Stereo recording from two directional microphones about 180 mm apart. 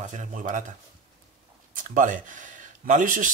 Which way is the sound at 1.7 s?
45° right (ahead or behind).